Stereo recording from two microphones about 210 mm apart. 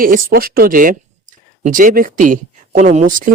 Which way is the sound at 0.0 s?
45° right (ahead or behind).